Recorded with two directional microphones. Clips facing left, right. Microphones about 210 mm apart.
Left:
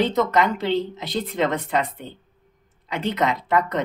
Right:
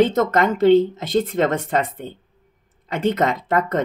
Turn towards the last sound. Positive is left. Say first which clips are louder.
# right 2 dB
turn(degrees=-50)  # may be behind; listen again after turning